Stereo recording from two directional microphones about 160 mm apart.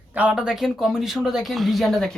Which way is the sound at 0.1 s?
10° right (ahead or behind).